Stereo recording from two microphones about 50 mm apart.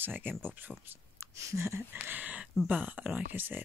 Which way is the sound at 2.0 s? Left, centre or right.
Right.